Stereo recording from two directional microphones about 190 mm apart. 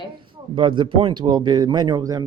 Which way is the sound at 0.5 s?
25° right (ahead or behind).